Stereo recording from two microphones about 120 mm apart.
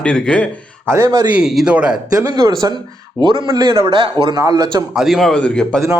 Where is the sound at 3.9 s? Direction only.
45° right (ahead or behind).